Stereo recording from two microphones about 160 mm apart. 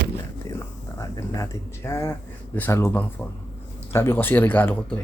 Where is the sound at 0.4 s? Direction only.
20° left (ahead or behind).